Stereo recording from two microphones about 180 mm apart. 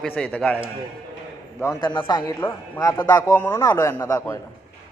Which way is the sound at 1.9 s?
25° left (ahead or behind).